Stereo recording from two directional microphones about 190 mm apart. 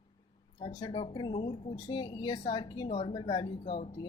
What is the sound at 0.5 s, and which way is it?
Speech, 25° left (ahead or behind).